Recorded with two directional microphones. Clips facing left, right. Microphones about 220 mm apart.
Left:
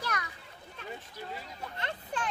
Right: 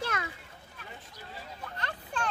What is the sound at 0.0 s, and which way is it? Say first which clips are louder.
Children playing: right 3 dB; 25° right (ahead or behind).